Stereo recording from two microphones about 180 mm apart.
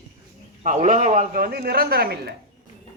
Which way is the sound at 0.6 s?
45° right (ahead or behind).